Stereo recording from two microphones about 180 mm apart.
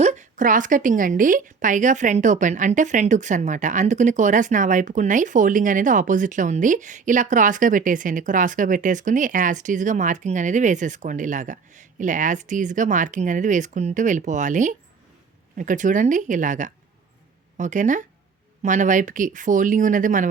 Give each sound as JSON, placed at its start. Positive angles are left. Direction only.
{"t": 0.0, "sound": "a woman's voice", "side_deg": -40}